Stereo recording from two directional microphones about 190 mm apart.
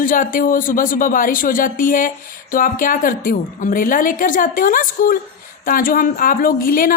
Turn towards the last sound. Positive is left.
turn(degrees=45)  # may be behind; listen again after turning